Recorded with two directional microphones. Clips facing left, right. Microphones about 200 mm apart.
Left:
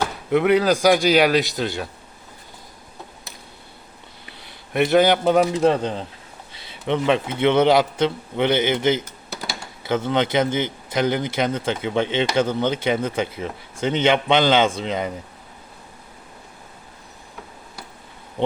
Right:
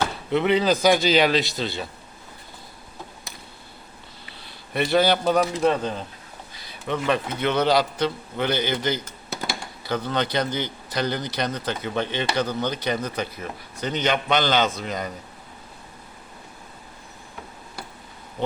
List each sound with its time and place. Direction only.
0.0 s speech: 10° left (ahead or behind)
4.7 s speech: 20° left (ahead or behind)